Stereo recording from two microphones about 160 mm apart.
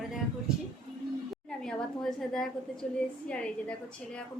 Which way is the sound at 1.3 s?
5° left (ahead or behind).